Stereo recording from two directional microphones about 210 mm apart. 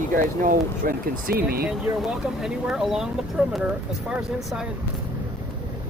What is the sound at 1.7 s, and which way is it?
Speech, 5° right (ahead or behind).